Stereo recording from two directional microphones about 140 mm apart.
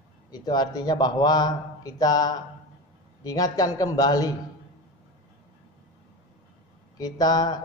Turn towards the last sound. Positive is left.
turn(degrees=30)  # may be behind; listen again after turning